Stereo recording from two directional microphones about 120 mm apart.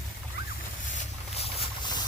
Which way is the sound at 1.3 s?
55° left (ahead or behind).